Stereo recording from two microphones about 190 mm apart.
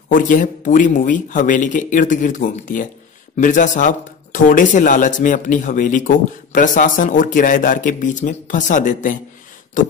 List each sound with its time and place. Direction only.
0.1 s speech: 45° left (ahead or behind)